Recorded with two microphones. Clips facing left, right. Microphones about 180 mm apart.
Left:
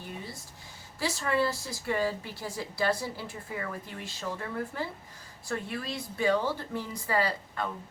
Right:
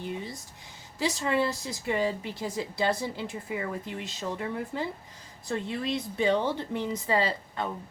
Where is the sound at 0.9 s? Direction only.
20° right (ahead or behind).